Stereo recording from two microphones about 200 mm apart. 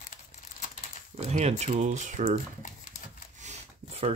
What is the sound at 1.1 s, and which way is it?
Speech, 30° right (ahead or behind).